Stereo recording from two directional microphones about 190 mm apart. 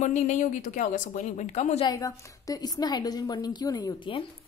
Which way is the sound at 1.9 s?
15° left (ahead or behind).